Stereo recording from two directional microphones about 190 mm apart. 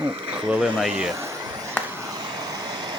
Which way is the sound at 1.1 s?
15° right (ahead or behind).